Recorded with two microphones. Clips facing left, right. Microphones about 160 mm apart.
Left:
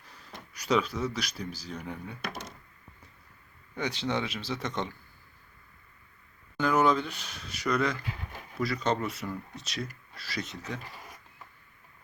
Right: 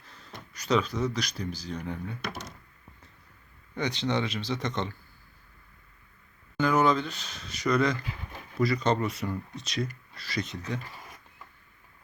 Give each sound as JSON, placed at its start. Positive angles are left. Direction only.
{"t": 0.1, "sound": "speech", "side_deg": 10}
{"t": 3.8, "sound": "speech", "side_deg": 5}
{"t": 6.6, "sound": "speech", "side_deg": 5}